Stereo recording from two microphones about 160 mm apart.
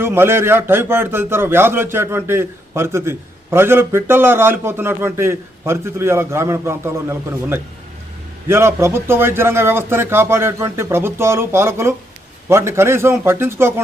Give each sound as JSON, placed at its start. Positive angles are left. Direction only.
{"t": 0.0, "sound": "a man's voice", "side_deg": -15}